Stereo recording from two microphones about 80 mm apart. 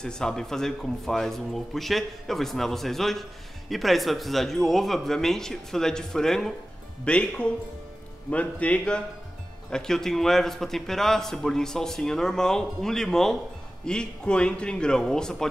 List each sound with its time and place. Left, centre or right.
0.0 s a man's voice: centre